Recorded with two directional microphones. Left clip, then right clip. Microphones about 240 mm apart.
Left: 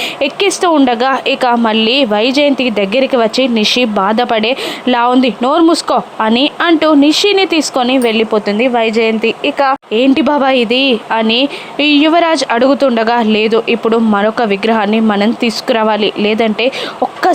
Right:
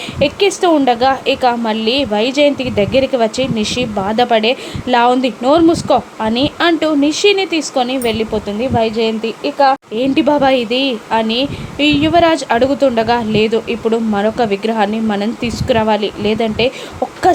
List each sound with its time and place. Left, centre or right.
0.2 s a woman's voice: centre